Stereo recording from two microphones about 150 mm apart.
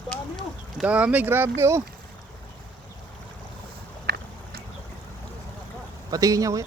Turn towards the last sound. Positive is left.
turn(degrees=-20)  # may be behind; listen again after turning